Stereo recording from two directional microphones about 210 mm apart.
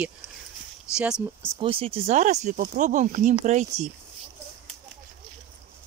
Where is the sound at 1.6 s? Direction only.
25° right (ahead or behind).